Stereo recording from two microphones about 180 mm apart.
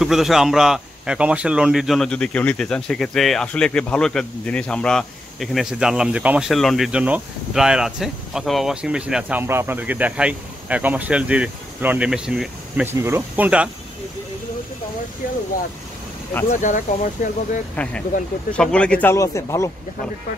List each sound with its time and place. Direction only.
0.0 s a man's voice: centre (ahead or behind)
16.6 s speech: 45° left (ahead or behind)
17.8 s speech: 10° left (ahead or behind)